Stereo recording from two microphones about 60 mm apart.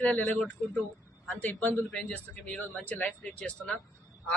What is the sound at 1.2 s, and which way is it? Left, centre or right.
Speech, left.